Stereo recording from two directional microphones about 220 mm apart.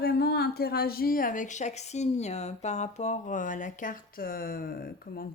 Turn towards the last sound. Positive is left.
turn(degrees=40)  # may be behind; listen again after turning